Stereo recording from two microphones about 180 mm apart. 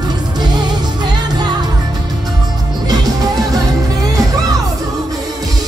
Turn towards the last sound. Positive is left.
turn(degrees=-20)  # may be behind; listen again after turning